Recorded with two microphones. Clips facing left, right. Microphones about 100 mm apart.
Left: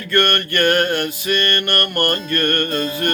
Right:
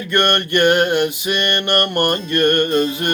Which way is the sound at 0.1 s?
20° right (ahead or behind).